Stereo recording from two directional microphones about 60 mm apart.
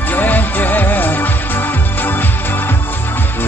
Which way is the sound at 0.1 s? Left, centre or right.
Left.